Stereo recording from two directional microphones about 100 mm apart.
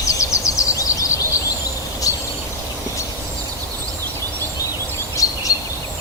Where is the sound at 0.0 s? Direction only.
30° left (ahead or behind).